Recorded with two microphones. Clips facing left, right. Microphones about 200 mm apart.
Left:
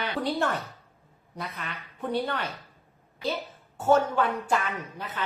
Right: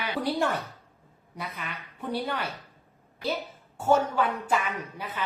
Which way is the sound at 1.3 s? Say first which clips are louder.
Even; 10° right (ahead or behind).